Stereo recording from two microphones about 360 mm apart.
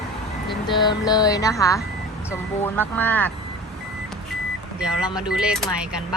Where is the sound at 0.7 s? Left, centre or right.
Centre.